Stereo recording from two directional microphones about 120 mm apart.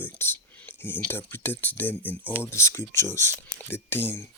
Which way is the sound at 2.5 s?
25° left (ahead or behind).